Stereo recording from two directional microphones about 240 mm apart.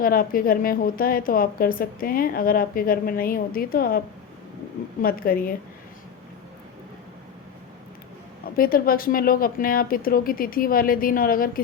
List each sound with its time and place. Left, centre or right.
0.0 s a woman's voice: left
5.0 s a woman's voice: left
8.5 s a woman's voice: left